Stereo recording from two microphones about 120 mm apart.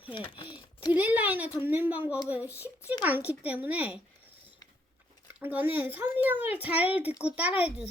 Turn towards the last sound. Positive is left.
turn(degrees=-10)  # may be behind; listen again after turning